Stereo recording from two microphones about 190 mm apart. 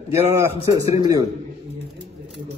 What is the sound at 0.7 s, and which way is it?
Speech, 20° right (ahead or behind).